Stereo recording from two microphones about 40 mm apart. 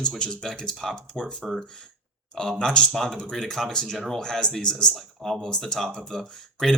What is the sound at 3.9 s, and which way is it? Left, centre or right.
Speech, centre.